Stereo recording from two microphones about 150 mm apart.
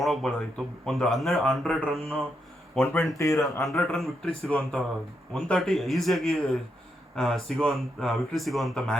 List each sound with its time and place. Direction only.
0.0 s speech: centre (ahead or behind)
2.8 s speech: 15° left (ahead or behind)
3.9 s speech: centre (ahead or behind)